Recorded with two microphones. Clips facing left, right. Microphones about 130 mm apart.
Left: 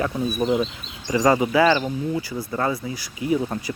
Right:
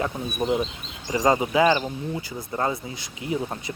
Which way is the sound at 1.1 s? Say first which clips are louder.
Left 3 dB; 25° right (ahead or behind).